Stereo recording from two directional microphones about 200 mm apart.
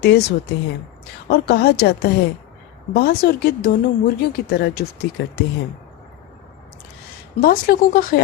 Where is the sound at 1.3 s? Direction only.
50° left (ahead or behind).